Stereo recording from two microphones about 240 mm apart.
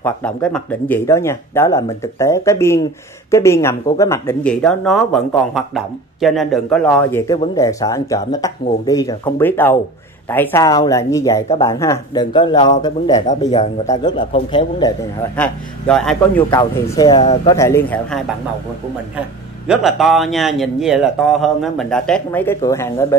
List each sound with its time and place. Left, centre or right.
0.0 s a man's voice: centre
15.3 s speech: centre
17.2 s a man's voice: left
17.6 s speech: centre
19.7 s speech: centre